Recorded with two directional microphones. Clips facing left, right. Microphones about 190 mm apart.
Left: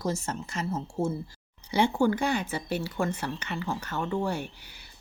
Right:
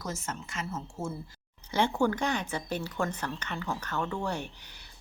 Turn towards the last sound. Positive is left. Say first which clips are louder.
# left 2 dB
turn(degrees=5)  # may be behind; listen again after turning